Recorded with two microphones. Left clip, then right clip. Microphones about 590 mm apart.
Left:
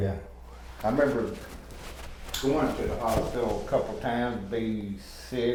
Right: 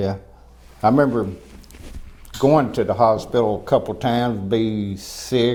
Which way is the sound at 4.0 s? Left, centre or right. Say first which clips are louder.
Right 8 dB; right.